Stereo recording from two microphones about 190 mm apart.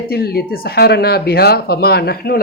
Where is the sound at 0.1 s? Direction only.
55° left (ahead or behind).